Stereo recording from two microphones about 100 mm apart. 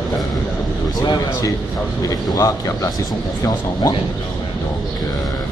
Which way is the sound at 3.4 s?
40° left (ahead or behind).